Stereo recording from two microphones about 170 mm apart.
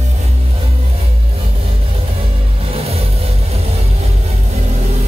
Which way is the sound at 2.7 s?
35° right (ahead or behind).